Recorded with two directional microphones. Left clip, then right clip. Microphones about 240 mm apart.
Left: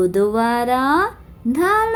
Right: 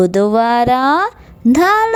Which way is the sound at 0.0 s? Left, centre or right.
Right.